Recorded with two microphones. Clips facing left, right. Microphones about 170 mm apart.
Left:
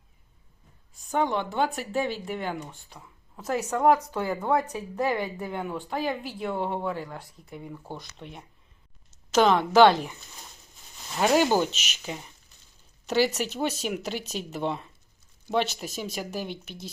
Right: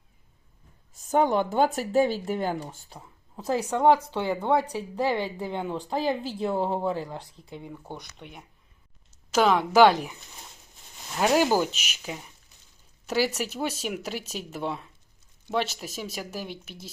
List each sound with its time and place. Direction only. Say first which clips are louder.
0.9 s a woman's voice: right 4 dB; 45° right (ahead or behind)
8.2 s a woman's voice: left 2 dB; centre (ahead or behind)